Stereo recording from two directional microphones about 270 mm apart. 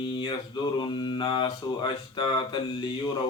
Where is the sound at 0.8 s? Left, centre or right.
Centre.